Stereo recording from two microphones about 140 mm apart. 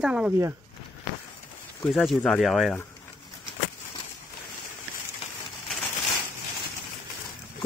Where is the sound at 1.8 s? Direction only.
Centre (ahead or behind).